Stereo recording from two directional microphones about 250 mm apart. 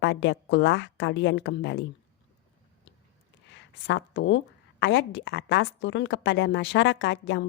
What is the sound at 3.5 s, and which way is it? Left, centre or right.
A woman's voice, left.